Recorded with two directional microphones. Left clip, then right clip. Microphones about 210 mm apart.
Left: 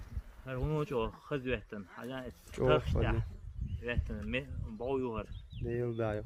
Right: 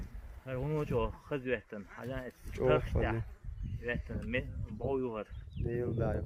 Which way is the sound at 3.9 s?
40° left (ahead or behind).